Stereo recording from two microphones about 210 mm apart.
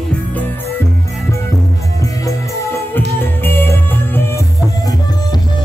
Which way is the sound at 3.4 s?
10° left (ahead or behind).